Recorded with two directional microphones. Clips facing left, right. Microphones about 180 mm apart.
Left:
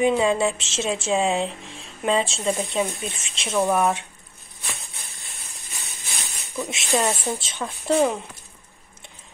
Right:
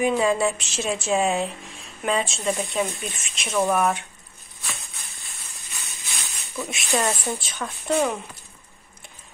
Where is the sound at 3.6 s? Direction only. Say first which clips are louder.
Left 1 dB; centre (ahead or behind).